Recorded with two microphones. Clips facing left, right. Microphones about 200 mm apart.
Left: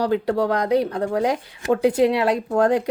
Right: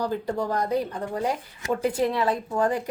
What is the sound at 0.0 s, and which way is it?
Speech, 75° left (ahead or behind).